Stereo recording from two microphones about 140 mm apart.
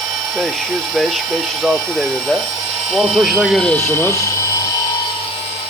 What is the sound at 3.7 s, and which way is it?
Speech, 15° left (ahead or behind).